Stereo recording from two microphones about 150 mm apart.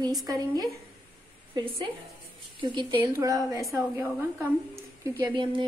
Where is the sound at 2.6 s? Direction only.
30° right (ahead or behind); by 4.8 s 15° right (ahead or behind).